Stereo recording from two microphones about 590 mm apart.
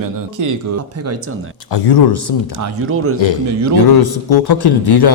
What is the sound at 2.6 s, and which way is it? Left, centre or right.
Speech, right.